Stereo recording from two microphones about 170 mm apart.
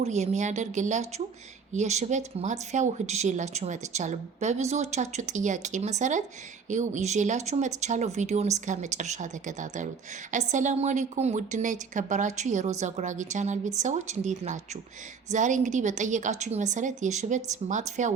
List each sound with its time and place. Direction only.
0.0 s speech: 40° right (ahead or behind)